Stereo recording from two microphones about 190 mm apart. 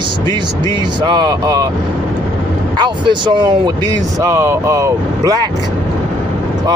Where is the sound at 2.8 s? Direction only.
25° right (ahead or behind).